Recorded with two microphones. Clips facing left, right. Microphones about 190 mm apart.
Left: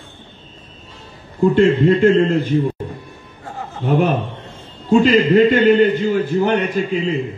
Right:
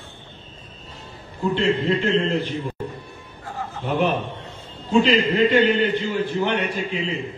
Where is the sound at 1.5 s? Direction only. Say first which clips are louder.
Left 7 dB; 50° left (ahead or behind).